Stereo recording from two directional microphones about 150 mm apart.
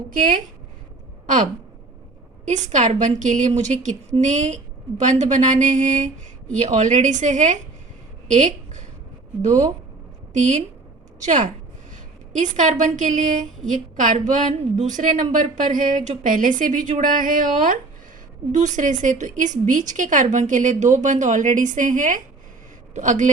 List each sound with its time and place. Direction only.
0.1 s a woman's voice: 60° right (ahead or behind)
2.4 s a woman's voice: 50° right (ahead or behind)